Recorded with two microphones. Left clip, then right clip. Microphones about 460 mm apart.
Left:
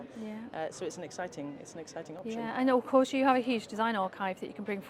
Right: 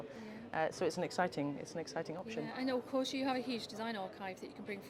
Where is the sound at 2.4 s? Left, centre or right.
Left.